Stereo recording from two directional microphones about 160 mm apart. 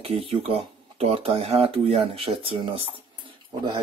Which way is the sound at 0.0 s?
35° right (ahead or behind).